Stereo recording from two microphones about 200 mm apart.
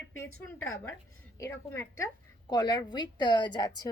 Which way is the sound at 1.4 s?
15° left (ahead or behind).